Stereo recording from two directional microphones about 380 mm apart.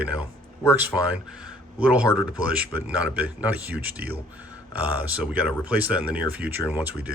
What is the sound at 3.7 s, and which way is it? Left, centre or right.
Speech, right.